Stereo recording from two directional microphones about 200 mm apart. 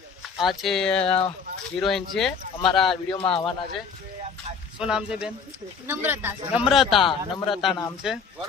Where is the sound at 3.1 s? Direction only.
25° left (ahead or behind).